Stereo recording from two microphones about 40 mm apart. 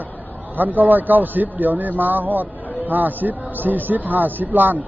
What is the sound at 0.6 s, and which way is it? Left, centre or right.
A man's voice, right.